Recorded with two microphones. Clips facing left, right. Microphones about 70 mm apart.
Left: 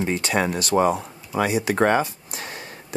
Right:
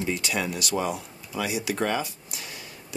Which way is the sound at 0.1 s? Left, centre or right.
Left.